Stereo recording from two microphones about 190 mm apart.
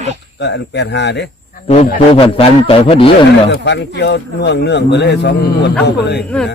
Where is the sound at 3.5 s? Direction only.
65° left (ahead or behind).